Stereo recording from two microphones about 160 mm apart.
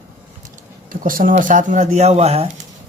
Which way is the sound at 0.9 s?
60° right (ahead or behind).